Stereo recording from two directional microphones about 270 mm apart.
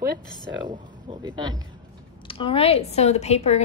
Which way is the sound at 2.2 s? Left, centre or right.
Centre.